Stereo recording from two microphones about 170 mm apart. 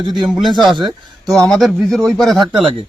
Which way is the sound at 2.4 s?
30° right (ahead or behind).